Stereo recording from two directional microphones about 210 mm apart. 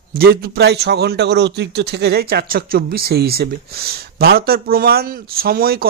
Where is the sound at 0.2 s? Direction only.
50° right (ahead or behind).